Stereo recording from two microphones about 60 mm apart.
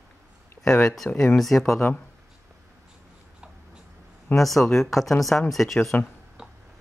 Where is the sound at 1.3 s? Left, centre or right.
Centre.